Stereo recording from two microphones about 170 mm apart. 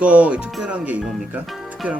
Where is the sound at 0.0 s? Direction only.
5° right (ahead or behind).